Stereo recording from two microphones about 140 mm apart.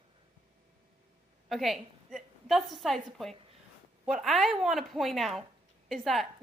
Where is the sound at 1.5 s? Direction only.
Centre (ahead or behind).